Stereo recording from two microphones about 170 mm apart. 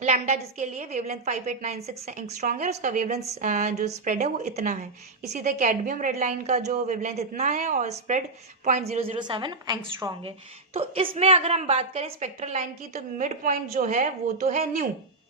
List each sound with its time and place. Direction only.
0.0 s a woman's voice: 40° right (ahead or behind); by 10.2 s 15° right (ahead or behind)
10.8 s a woman's voice: 35° right (ahead or behind)